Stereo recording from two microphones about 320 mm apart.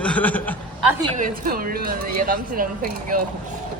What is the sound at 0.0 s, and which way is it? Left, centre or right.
Speech, centre.